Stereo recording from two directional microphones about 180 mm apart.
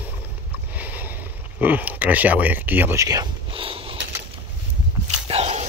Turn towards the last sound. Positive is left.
turn(degrees=-35)  # may be behind; listen again after turning